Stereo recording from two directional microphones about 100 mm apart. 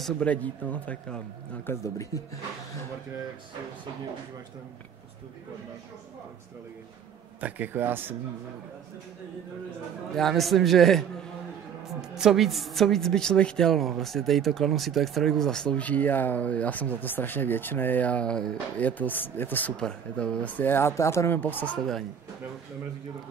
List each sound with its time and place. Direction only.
0.2 s a woman's voice: 15° left (ahead or behind)
1.7 s speech: 30° left (ahead or behind)
7.3 s speech: 15° right (ahead or behind)
10.1 s a man's voice: centre (ahead or behind); by 19.7 s 20° left (ahead or behind)
19.8 s speech: 10° left (ahead or behind)
21.7 s a man's voice: 5° left (ahead or behind)